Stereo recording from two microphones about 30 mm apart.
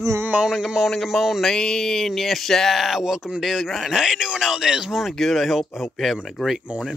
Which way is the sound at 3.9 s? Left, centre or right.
Centre.